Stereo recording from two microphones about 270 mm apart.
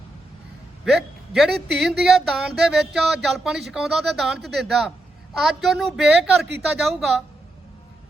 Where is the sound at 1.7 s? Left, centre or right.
Centre.